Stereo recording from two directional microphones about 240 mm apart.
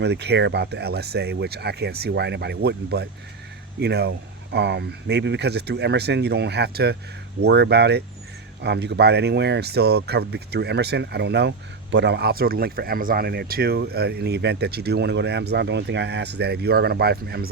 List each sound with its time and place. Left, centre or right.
0.0 s speech: right